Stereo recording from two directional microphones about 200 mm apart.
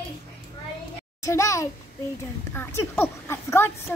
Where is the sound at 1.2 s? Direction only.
15° left (ahead or behind).